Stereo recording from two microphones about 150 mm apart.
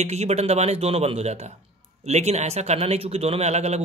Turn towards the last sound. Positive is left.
turn(degrees=-45)  # may be behind; listen again after turning